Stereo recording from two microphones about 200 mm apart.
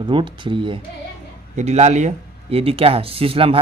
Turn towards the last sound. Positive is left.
turn(degrees=-30)  # may be behind; listen again after turning